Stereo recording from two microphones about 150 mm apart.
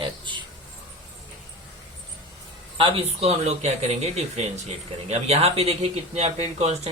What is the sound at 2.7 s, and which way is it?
A man's voice, 35° right (ahead or behind).